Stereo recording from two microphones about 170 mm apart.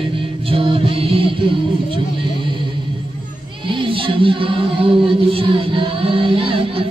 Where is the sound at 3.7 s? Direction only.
30° right (ahead or behind).